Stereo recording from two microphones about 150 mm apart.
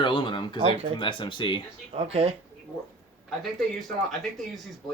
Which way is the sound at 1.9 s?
45° right (ahead or behind).